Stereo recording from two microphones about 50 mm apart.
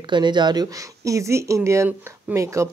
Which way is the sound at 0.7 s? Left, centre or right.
Right.